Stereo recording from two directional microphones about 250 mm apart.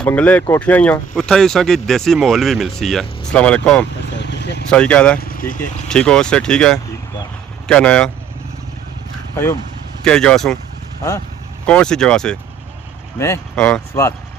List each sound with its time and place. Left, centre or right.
0.0 s speech: centre
4.1 s vehicle: left
4.7 s speech: centre
5.2 s vehicle: left
5.9 s speech: centre
9.3 s speech: centre
11.6 s speech: centre